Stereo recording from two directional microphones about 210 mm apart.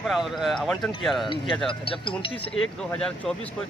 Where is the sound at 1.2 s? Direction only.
20° left (ahead or behind).